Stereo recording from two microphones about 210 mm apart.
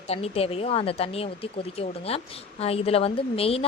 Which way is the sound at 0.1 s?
30° left (ahead or behind).